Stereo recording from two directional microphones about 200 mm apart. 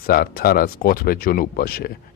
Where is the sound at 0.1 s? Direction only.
50° left (ahead or behind).